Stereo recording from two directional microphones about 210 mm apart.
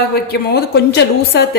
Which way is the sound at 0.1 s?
50° left (ahead or behind).